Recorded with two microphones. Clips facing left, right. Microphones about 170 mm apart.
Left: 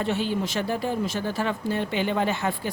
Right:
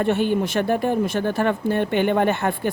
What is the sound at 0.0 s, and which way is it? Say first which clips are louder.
Speech: right 6 dB; 55° right (ahead or behind).